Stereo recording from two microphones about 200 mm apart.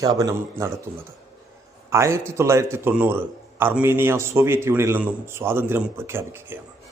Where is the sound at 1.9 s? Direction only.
15° right (ahead or behind).